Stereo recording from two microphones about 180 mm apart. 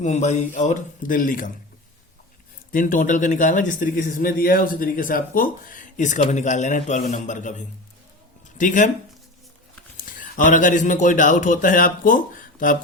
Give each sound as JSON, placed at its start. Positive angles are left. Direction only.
{"t": 0.0, "sound": "speech", "side_deg": 40}
{"t": 2.7, "sound": "speech", "side_deg": 45}
{"t": 8.5, "sound": "speech", "side_deg": 45}
{"t": 10.0, "sound": "a man's voice", "side_deg": 45}